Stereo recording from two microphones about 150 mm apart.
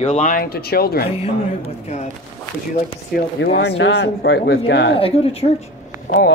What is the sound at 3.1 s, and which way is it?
Speech, 75° left (ahead or behind).